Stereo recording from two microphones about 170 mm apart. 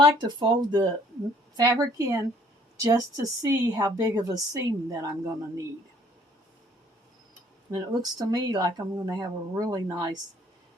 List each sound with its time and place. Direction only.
0.0 s a woman's voice: 25° right (ahead or behind)
7.7 s a woman's voice: 25° right (ahead or behind)